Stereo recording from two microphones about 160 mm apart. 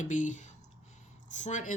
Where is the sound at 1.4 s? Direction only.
50° left (ahead or behind).